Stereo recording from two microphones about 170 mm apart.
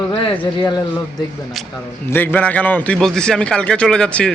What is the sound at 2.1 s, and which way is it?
A man's voice, 10° left (ahead or behind).